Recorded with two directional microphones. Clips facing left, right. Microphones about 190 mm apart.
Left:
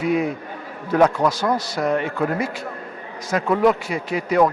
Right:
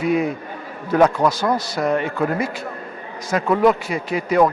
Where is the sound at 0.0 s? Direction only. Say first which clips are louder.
Right 1 dB; 10° right (ahead or behind).